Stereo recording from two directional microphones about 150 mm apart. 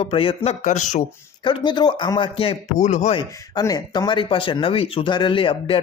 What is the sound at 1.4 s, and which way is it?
Speech, 30° left (ahead or behind).